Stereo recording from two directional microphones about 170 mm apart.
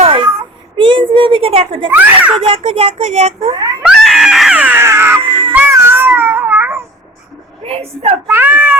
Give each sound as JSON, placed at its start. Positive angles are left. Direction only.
{"t": 0.0, "sound": "a sound", "side_deg": -35}
{"t": 1.9, "sound": "a child's voice", "side_deg": -10}
{"t": 2.5, "sound": "speech", "side_deg": -35}
{"t": 3.8, "sound": "cat", "side_deg": 0}
{"t": 5.2, "sound": "cat", "side_deg": -30}
{"t": 5.5, "sound": "cat", "side_deg": -15}
{"t": 7.6, "sound": "speech", "side_deg": -35}
{"t": 8.3, "sound": "a child's voice", "side_deg": -10}